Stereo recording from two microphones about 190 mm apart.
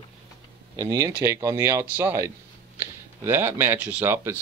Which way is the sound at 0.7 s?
15° right (ahead or behind).